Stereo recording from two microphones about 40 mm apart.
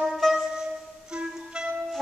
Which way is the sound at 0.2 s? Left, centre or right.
Centre.